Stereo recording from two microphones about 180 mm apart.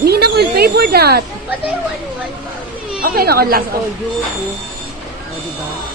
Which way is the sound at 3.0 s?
55° right (ahead or behind).